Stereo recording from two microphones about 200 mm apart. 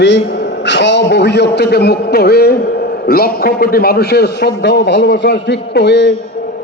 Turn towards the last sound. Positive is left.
turn(degrees=60)  # may be behind; listen again after turning